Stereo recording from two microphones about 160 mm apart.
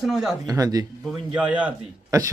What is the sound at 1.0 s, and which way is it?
Speech, 5° right (ahead or behind).